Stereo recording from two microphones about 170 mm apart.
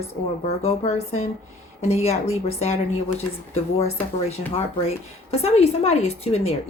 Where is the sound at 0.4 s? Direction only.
40° left (ahead or behind).